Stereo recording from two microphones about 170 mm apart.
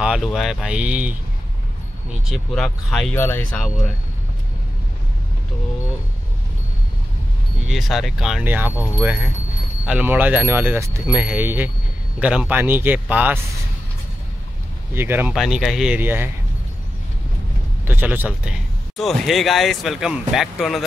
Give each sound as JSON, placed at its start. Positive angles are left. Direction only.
{"t": 0.0, "sound": "speech", "side_deg": -5}
{"t": 2.2, "sound": "speech", "side_deg": 0}
{"t": 3.2, "sound": "speech", "side_deg": 10}
{"t": 7.6, "sound": "speech", "side_deg": 0}
{"t": 15.0, "sound": "speech", "side_deg": -10}
{"t": 15.3, "sound": "speech", "side_deg": 0}
{"t": 17.8, "sound": "speech", "side_deg": -10}